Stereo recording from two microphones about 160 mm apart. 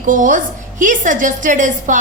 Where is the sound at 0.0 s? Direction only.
55° right (ahead or behind).